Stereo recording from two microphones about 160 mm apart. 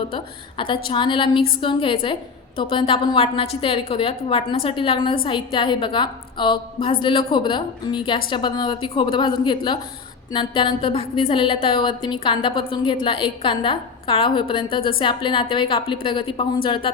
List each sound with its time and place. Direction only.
0.1 s a woman's voice: 30° left (ahead or behind)